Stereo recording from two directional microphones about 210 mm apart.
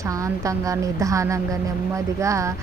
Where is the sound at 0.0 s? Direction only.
15° right (ahead or behind).